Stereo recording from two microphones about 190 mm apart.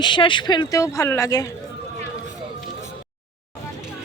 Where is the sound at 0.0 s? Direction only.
25° left (ahead or behind).